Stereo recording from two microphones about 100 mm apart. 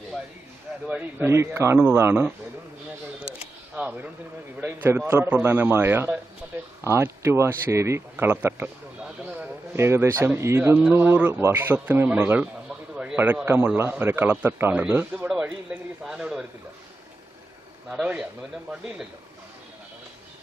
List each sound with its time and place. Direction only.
1.2 s speech: 25° right (ahead or behind)
3.2 s camera: 10° right (ahead or behind)
4.6 s speech: 20° right (ahead or behind)
9.7 s speech: 25° right (ahead or behind)
12.9 s a sound: 5° right (ahead or behind)
13.1 s speech: 20° right (ahead or behind)
18.0 s a man's voice: 10° right (ahead or behind)